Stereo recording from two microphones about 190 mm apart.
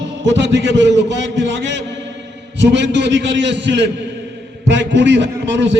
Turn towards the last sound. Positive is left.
turn(degrees=-70)  # may be behind; listen again after turning